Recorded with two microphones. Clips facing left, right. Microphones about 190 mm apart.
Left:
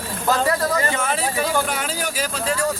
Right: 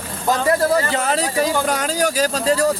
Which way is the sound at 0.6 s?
30° right (ahead or behind).